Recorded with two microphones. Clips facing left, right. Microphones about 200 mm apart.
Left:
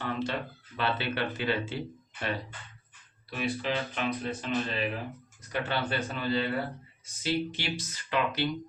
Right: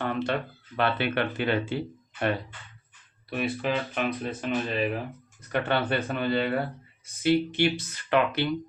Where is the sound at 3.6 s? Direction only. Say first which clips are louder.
Right 4 dB; 55° right (ahead or behind).